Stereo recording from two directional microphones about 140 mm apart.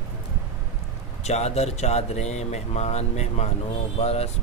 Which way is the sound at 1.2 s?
50° left (ahead or behind).